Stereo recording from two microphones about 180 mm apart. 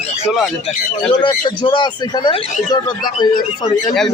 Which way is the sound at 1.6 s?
25° left (ahead or behind).